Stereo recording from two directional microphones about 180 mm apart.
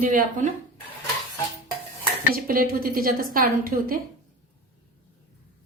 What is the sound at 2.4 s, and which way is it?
A woman's voice, 55° right (ahead or behind).